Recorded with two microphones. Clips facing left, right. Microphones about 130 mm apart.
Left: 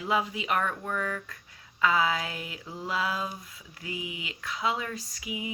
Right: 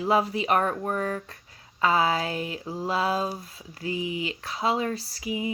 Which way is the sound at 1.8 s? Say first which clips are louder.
Right 3 dB; 35° right (ahead or behind).